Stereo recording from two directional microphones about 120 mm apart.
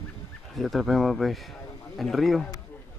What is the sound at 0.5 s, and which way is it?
A man's voice, centre (ahead or behind).